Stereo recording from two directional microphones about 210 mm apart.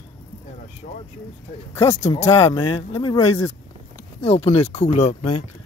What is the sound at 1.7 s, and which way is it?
Speech, 10° left (ahead or behind).